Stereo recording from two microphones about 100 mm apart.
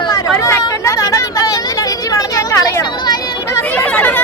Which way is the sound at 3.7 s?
15° left (ahead or behind).